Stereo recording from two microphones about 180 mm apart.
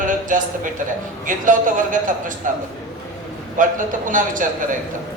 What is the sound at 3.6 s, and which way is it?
Speech, 45° right (ahead or behind).